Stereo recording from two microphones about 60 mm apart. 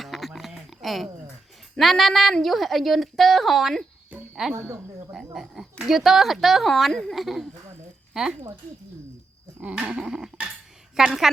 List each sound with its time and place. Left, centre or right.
0.0 s a sound: centre
1.8 s speech: centre
4.1 s speech: right
4.5 s speech: right
5.1 s speech: centre
9.6 s dog: right
10.9 s a woman's voice: centre